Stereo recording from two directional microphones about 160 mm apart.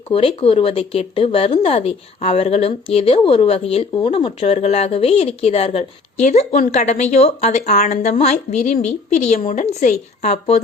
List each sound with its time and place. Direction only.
0.1 s a woman's voice: 35° left (ahead or behind)